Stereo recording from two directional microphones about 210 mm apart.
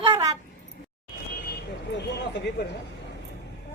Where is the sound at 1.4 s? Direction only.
50° left (ahead or behind).